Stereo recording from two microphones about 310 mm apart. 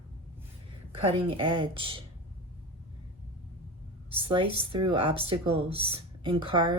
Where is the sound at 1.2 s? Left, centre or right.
Centre.